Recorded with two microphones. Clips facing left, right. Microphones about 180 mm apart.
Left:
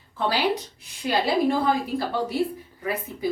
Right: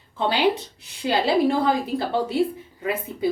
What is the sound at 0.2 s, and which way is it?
Speech, 20° right (ahead or behind).